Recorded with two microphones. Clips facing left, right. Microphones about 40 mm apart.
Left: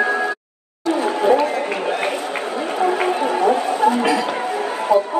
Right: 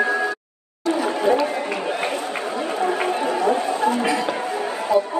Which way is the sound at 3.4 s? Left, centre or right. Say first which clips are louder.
Left 4 dB; left.